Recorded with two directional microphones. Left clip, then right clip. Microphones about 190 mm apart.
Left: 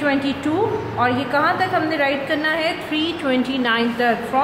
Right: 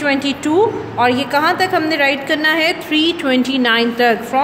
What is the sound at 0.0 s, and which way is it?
A woman's voice, 55° right (ahead or behind).